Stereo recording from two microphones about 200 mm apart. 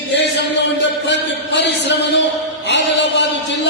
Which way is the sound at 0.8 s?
60° left (ahead or behind).